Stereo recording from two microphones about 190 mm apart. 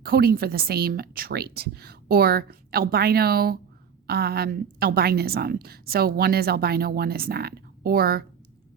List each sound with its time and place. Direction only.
0.0 s a woman's voice: 55° right (ahead or behind)